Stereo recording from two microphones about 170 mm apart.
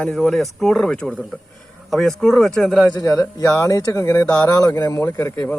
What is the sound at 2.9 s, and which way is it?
A man's voice, 25° left (ahead or behind).